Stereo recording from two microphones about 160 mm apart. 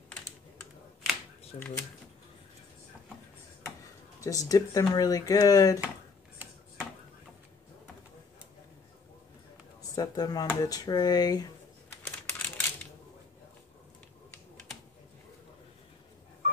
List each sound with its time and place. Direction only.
4.2 s speech: 20° left (ahead or behind)
6.3 s a sound: 10° right (ahead or behind)
9.9 s speech: 25° left (ahead or behind)
12.0 s computer keyboard: 15° left (ahead or behind)